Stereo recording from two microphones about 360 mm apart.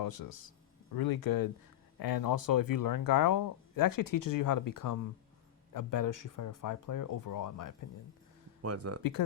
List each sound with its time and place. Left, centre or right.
0.0 s a man's voice: left
8.6 s speech: right